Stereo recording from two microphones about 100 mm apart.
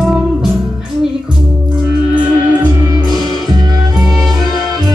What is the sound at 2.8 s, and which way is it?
Music, 45° right (ahead or behind).